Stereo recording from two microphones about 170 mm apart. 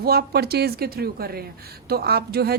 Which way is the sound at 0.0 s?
65° right (ahead or behind).